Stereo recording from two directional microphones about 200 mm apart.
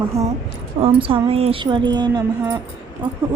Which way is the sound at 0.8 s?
25° right (ahead or behind).